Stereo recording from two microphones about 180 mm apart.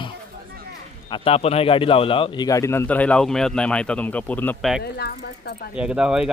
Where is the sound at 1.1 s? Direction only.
30° left (ahead or behind); by 4.7 s 10° left (ahead or behind).